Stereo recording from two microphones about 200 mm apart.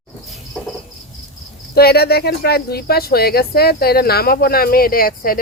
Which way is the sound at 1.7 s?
50° left (ahead or behind).